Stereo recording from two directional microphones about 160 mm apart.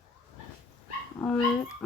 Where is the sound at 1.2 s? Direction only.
10° left (ahead or behind).